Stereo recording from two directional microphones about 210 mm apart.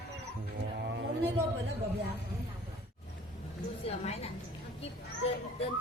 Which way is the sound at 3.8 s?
30° left (ahead or behind).